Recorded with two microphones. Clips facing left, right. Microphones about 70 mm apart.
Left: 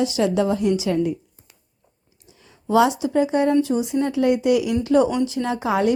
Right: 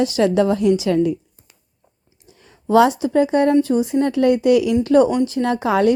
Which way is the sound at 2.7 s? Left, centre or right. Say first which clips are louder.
Right 3 dB; right.